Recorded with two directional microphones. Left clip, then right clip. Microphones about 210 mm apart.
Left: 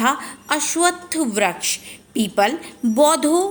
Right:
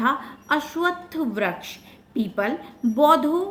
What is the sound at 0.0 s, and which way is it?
A woman's voice, 35° left (ahead or behind).